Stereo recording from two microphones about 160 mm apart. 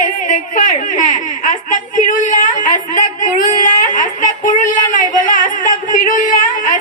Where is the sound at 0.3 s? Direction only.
55° left (ahead or behind).